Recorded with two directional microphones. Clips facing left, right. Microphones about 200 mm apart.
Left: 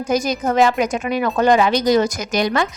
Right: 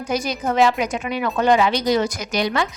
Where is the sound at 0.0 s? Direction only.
45° left (ahead or behind).